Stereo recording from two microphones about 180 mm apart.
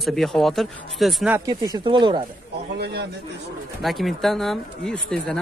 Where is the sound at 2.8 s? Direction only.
65° right (ahead or behind).